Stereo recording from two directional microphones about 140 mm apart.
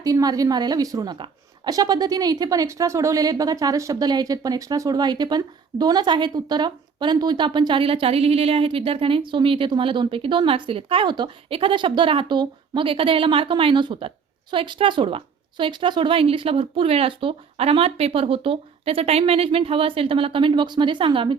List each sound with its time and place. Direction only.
0.0 s a woman's voice: 25° right (ahead or behind)